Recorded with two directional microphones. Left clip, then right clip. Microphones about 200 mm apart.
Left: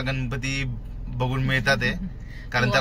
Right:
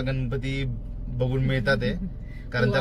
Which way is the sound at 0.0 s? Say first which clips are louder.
Left 2 dB; 10° left (ahead or behind).